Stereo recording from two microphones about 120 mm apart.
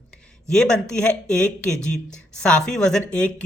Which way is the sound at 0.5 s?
5° left (ahead or behind).